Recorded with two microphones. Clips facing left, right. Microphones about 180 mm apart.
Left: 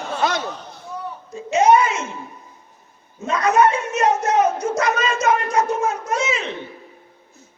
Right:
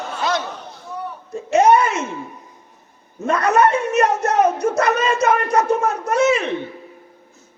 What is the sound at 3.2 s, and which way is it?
Speech, 60° right (ahead or behind).